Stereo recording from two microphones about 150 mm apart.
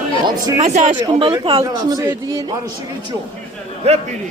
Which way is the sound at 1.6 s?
25° right (ahead or behind).